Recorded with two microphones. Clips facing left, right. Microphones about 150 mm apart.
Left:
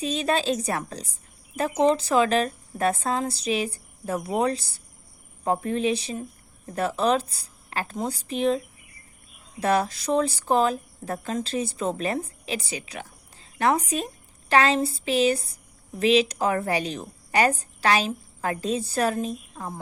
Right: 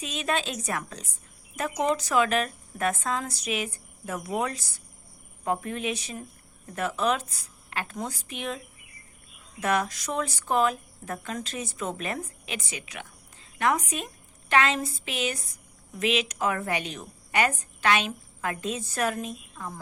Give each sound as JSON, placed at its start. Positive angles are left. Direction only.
{"t": 0.0, "sound": "a woman's voice", "side_deg": 35}